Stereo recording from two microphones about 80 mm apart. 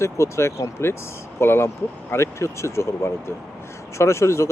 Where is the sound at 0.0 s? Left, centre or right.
Left.